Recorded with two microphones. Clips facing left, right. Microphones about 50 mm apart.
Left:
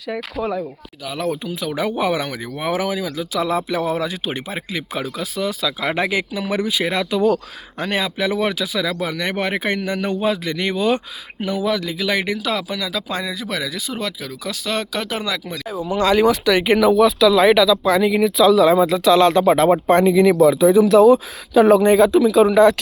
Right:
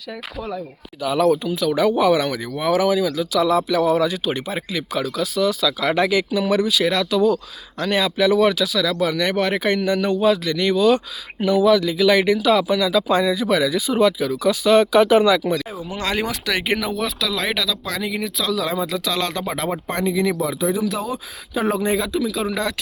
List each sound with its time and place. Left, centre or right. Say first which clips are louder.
1.2 s speech: right 5 dB; centre
11.3 s speech: right 6 dB; centre
18.7 s speech: left 9 dB; left
19.4 s speech: left 11 dB; left
20.2 s speech: left 9 dB; left
21.9 s speech: left 9 dB; left